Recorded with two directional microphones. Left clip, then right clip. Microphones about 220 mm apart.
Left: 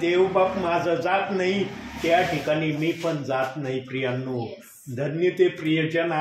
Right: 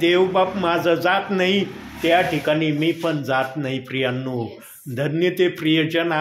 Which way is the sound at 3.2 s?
40° right (ahead or behind).